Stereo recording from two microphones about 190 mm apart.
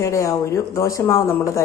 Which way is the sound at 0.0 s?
15° left (ahead or behind).